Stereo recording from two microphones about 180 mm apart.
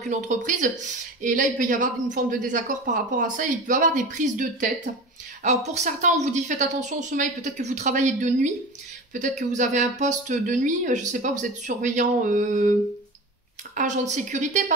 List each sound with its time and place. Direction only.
0.1 s speech: 45° right (ahead or behind)
13.7 s a woman's voice: 40° right (ahead or behind)